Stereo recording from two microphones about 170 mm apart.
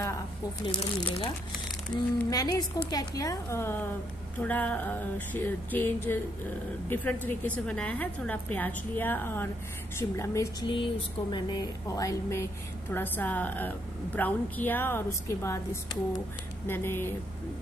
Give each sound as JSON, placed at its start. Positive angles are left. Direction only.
{"t": 0.7, "sound": "a woman's voice", "side_deg": 30}
{"t": 10.7, "sound": "a woman's voice", "side_deg": 25}